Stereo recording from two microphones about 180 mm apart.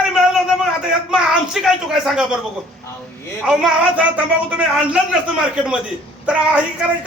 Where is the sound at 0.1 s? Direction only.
5° right (ahead or behind).